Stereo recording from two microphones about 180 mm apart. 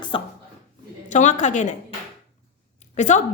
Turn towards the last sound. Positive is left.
turn(degrees=40)  # may be behind; listen again after turning